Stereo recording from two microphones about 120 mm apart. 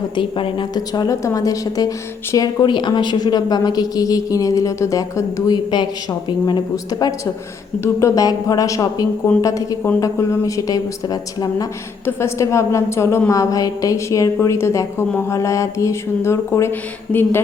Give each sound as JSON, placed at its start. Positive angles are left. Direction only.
{"t": 0.2, "sound": "a woman's voice", "side_deg": 45}